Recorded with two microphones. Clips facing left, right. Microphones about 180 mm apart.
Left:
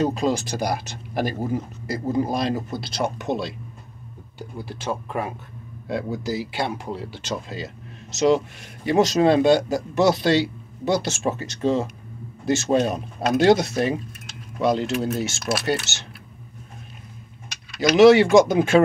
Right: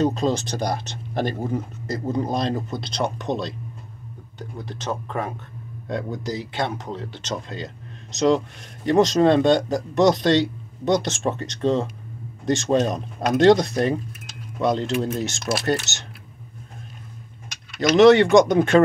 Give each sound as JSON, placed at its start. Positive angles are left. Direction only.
{"t": 0.0, "sound": "speech", "side_deg": 5}
{"t": 17.8, "sound": "speech", "side_deg": 5}